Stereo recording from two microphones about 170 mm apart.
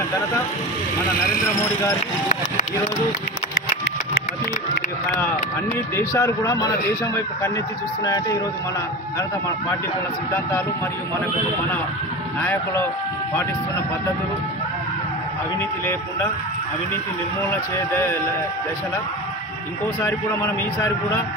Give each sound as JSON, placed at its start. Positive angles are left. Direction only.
{"t": 5.9, "sound": "a man's voice", "side_deg": 15}
{"t": 8.0, "sound": "speech", "side_deg": 20}
{"t": 12.4, "sound": "a man's voice", "side_deg": 15}
{"t": 17.4, "sound": "a man's voice", "side_deg": 15}